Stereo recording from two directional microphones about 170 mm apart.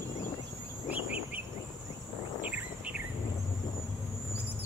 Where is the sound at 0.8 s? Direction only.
10° right (ahead or behind).